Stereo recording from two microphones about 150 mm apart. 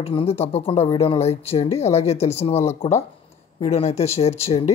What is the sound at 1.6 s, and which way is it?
Speech, 20° left (ahead or behind).